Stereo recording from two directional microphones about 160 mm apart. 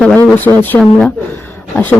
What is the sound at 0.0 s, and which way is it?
Speech, 10° left (ahead or behind).